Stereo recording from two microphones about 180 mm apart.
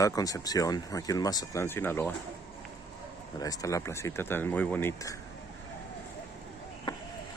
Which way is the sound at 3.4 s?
20° left (ahead or behind).